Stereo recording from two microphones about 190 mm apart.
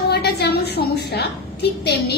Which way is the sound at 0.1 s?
60° left (ahead or behind).